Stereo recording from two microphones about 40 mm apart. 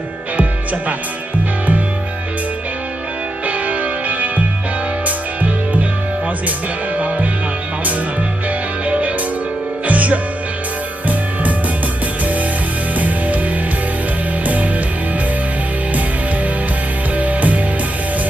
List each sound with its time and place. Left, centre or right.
0.3 s music: right
3.4 s music: right
6.9 s music: right
8.4 s music: right
12.2 s music: right
14.4 s music: right
17.2 s music: right